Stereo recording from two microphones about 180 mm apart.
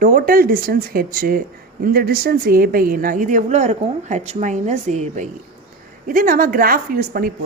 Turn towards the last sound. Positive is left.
turn(degrees=-55)  # may be behind; listen again after turning